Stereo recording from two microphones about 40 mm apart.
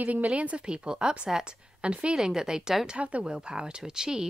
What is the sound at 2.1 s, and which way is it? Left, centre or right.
Speech, centre.